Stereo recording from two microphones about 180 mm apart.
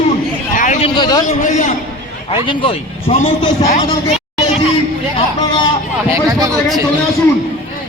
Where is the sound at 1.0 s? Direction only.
20° left (ahead or behind).